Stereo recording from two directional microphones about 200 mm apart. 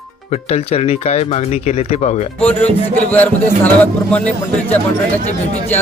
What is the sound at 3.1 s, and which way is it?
Speech, 10° left (ahead or behind).